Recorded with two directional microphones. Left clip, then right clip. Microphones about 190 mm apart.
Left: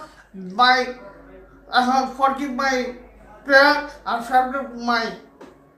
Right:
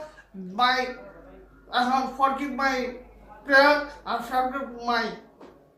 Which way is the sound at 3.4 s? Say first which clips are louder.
Left 4 dB; centre (ahead or behind).